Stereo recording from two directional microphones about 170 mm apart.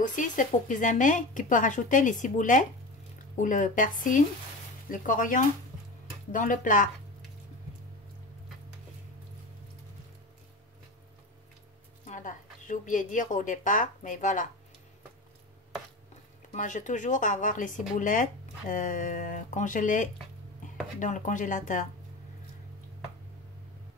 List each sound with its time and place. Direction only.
0.0 s speech: 50° left (ahead or behind)
12.1 s a woman's voice: 50° left (ahead or behind)
16.5 s speech: 50° left (ahead or behind)